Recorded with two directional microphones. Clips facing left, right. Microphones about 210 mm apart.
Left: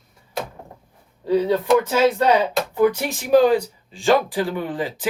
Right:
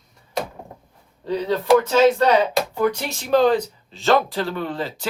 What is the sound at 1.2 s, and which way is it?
Speech, 10° left (ahead or behind).